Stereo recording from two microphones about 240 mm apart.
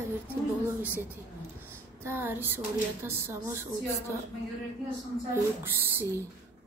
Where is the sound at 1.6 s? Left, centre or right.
Centre.